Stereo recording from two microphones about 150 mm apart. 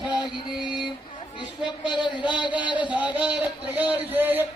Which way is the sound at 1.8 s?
30° left (ahead or behind).